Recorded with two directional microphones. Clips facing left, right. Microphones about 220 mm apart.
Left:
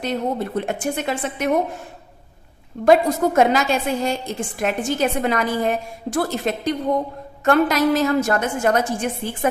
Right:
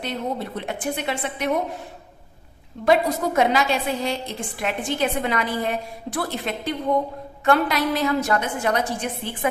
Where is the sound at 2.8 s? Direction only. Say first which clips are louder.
Left 4 dB; 45° left (ahead or behind).